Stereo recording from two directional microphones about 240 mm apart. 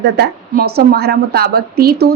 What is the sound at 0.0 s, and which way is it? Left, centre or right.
A woman's voice, right.